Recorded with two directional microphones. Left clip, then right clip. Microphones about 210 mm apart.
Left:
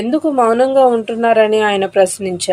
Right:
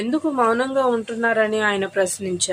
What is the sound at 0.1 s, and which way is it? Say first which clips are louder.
Speech: left 6 dB; 15° left (ahead or behind).